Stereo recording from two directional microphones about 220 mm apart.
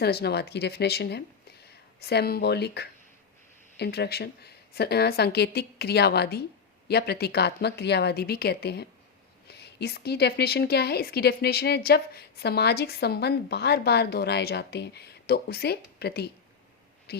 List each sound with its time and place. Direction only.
0.0 s a woman's voice: 45° left (ahead or behind)